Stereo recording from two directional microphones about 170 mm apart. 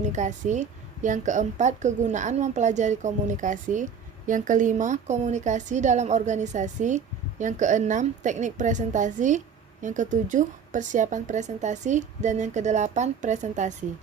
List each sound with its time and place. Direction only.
0.0 s a woman's voice: 45° right (ahead or behind)